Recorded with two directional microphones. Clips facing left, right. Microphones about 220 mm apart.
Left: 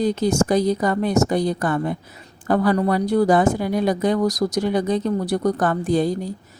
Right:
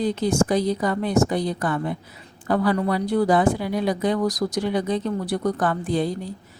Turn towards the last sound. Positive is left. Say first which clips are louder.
# left 4 dB
turn(degrees=40)  # may be behind; listen again after turning